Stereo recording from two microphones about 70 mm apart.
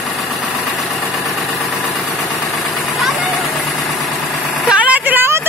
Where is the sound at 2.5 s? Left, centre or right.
Centre.